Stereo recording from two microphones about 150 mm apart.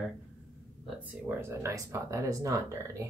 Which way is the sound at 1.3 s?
15° right (ahead or behind).